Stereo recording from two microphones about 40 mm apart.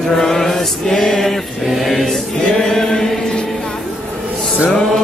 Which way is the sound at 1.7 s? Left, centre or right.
Centre.